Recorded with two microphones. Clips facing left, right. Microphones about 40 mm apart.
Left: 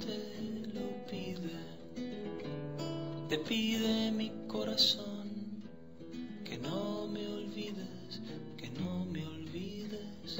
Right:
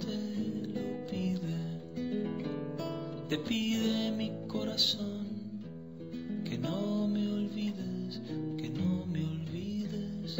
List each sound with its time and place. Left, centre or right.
0.0 s music: centre
2.0 s music: centre
3.3 s music: centre
6.6 s music: centre
8.7 s music: centre